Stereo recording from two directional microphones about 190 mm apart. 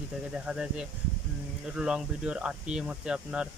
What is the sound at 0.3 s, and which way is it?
Speech, 5° right (ahead or behind).